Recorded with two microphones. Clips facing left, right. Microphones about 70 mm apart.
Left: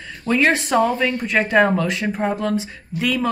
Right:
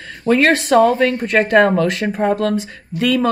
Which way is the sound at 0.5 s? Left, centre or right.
Right.